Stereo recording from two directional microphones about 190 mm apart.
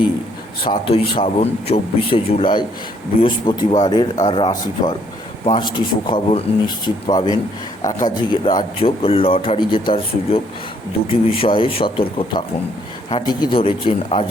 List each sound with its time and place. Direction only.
0.6 s speech: 30° left (ahead or behind)
5.5 s speech: 25° left (ahead or behind)